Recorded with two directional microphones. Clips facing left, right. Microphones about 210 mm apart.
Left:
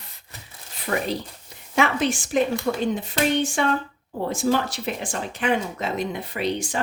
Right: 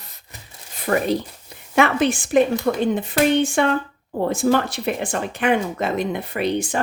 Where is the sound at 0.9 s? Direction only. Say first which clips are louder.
Right 6 dB; 50° right (ahead or behind).